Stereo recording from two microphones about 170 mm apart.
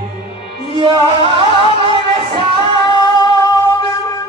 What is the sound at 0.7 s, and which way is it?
Music, 30° right (ahead or behind).